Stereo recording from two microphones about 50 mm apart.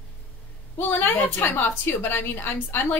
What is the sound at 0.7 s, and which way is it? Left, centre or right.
A woman's voice, left.